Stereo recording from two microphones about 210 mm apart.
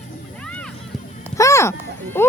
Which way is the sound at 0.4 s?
5° left (ahead or behind).